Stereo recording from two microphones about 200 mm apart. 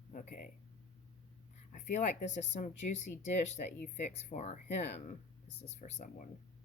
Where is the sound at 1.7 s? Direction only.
35° left (ahead or behind).